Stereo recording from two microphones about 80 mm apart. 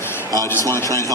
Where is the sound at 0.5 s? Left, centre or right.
Left.